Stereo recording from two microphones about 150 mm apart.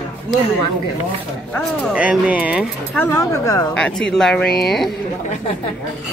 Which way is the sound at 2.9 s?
15° left (ahead or behind).